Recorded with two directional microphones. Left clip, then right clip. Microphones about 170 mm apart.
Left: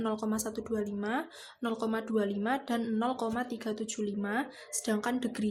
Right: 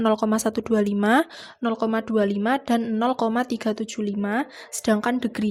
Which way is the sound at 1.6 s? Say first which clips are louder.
Right 9 dB; 40° right (ahead or behind).